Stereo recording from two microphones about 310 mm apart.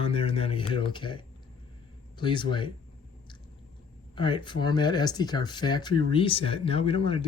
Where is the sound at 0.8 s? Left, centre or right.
Centre.